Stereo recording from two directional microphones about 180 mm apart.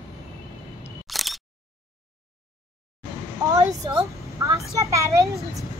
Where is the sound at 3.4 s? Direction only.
20° right (ahead or behind).